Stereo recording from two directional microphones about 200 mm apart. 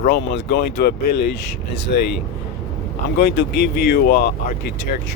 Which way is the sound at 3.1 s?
50° left (ahead or behind).